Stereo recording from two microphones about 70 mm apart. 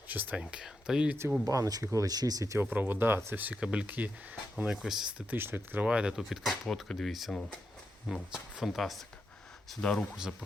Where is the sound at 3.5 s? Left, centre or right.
Centre.